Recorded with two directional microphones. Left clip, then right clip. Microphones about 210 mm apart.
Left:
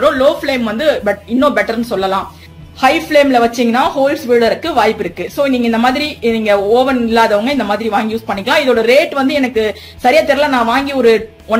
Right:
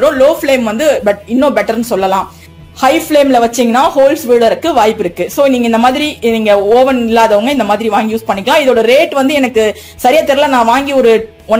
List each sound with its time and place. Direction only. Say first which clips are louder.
0.0 s speech: right 3 dB; 25° right (ahead or behind)